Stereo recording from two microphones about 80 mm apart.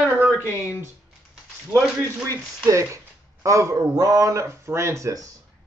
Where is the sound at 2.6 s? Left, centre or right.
Right.